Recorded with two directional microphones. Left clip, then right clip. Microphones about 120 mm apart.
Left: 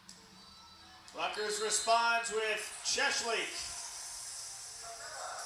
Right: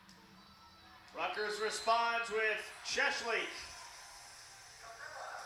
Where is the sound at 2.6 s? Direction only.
15° left (ahead or behind).